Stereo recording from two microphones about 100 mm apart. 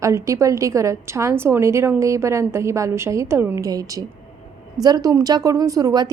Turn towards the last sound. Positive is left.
turn(degrees=-40)  # may be behind; listen again after turning